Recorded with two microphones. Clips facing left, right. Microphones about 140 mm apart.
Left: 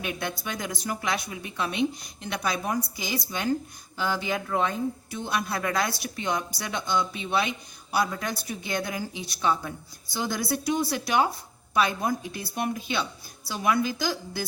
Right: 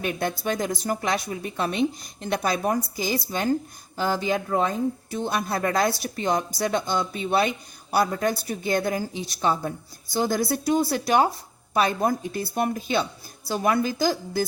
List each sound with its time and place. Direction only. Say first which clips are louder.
0.0 s speech: right 6 dB; 45° right (ahead or behind)